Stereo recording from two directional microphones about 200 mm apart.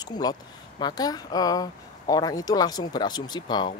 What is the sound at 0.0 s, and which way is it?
Speech, 20° left (ahead or behind).